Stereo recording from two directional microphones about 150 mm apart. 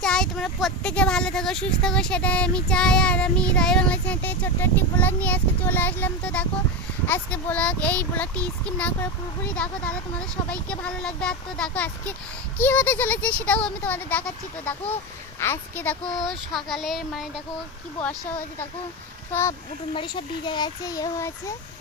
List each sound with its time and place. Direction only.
0.0 s speech: 5° left (ahead or behind)
19.3 s speech: 15° left (ahead or behind)
19.9 s a child's voice: 35° left (ahead or behind)